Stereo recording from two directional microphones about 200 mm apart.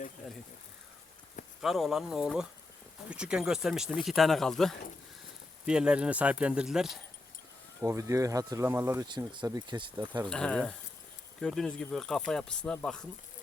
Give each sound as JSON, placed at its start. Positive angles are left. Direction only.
{"t": 1.6, "sound": "speech", "side_deg": 0}
{"t": 7.8, "sound": "speech", "side_deg": -15}
{"t": 10.2, "sound": "speech", "side_deg": 5}